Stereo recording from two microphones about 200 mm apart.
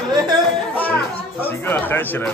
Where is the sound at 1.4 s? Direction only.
10° left (ahead or behind).